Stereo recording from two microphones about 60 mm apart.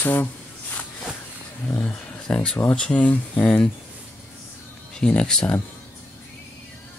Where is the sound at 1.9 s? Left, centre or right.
Centre.